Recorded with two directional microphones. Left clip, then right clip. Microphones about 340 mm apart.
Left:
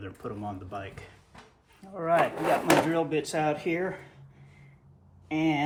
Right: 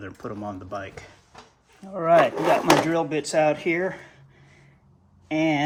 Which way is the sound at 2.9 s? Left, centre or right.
Right.